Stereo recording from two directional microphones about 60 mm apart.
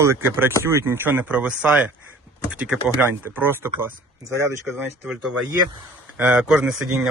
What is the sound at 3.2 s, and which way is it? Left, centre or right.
Speech, right.